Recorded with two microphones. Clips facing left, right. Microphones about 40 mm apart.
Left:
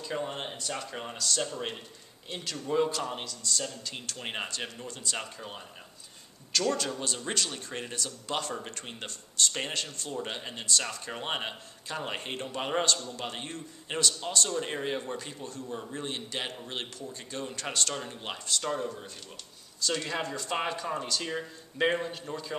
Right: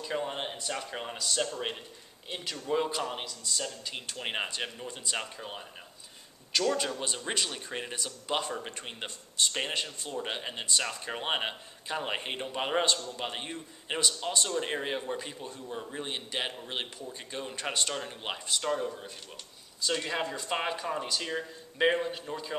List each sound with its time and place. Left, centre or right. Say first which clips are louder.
0.0 s a man's voice: right 1 dB; centre